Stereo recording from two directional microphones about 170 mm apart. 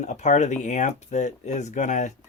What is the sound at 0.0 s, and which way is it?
Speech, 45° left (ahead or behind).